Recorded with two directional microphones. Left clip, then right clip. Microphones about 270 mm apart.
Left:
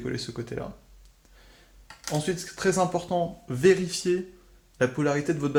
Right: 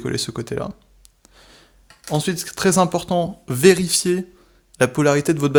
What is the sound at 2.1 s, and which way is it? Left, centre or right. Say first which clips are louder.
Speech: right 6 dB; right.